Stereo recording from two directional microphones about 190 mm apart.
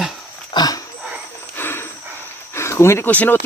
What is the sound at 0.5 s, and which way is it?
Dog, 20° left (ahead or behind).